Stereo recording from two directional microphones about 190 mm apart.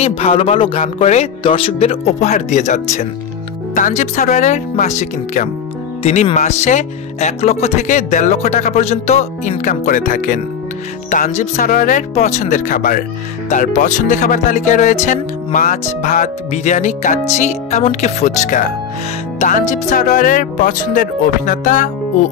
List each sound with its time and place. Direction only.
0.0 s music: 30° left (ahead or behind)
11.1 s speech: 40° left (ahead or behind)
13.5 s music: 40° left (ahead or behind)
19.4 s speech: 40° left (ahead or behind)